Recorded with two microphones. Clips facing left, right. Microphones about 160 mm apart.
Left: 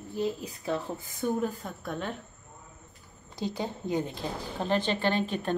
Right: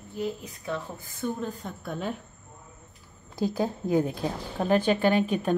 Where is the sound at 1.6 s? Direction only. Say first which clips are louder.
Right 2 dB; centre (ahead or behind).